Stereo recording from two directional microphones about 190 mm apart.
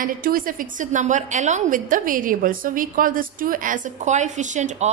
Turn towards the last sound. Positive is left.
turn(degrees=-40)  # may be behind; listen again after turning